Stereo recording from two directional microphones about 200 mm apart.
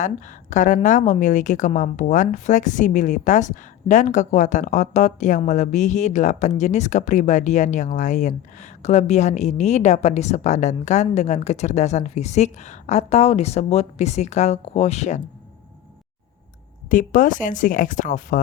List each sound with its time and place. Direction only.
0.5 s a woman's voice: 40° left (ahead or behind)
16.9 s a woman's voice: 40° left (ahead or behind)